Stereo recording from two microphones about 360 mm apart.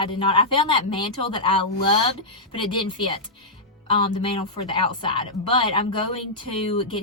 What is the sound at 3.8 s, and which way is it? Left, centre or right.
A woman's voice, centre.